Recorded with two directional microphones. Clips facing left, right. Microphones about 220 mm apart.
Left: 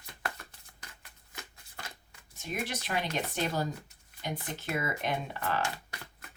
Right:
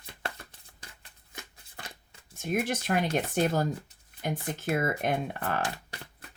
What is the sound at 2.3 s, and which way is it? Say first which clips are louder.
Speech: right 7 dB; 50° right (ahead or behind).